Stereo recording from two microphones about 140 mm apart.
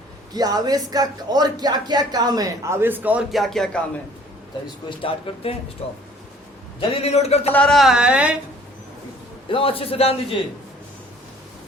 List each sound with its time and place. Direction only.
0.3 s speech: 30° right (ahead or behind); by 3.2 s 10° right (ahead or behind)
3.3 s speech: centre (ahead or behind)
4.9 s a man's voice: 40° left (ahead or behind)
7.5 s speech: 5° left (ahead or behind)
9.5 s a man's voice: 40° left (ahead or behind)